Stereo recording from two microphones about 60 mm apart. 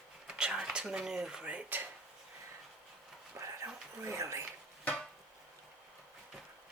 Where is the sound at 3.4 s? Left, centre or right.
Right.